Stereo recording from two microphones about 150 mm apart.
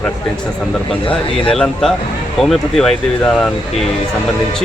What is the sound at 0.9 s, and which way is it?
Speech, 35° left (ahead or behind).